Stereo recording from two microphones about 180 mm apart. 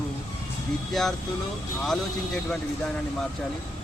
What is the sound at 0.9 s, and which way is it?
Speech, centre (ahead or behind).